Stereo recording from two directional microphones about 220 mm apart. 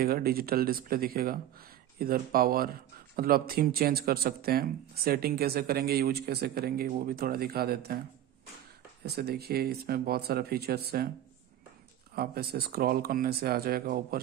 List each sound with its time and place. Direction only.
0.0 s speech: 45° right (ahead or behind)
9.0 s speech: 45° right (ahead or behind)
12.2 s speech: 45° right (ahead or behind)